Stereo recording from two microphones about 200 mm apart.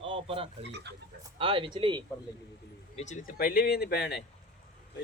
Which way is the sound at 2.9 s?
35° left (ahead or behind).